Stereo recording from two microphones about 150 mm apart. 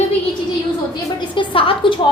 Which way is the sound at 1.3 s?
35° left (ahead or behind).